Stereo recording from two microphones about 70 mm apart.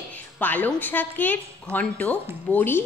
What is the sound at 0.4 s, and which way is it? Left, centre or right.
A woman's voice, left.